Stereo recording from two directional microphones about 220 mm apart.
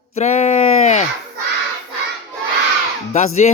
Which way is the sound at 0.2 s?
30° left (ahead or behind).